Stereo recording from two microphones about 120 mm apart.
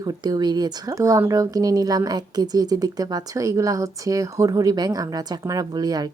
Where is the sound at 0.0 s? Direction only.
35° right (ahead or behind).